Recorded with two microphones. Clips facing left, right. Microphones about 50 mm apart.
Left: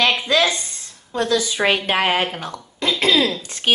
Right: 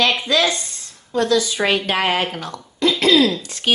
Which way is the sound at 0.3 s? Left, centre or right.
Left.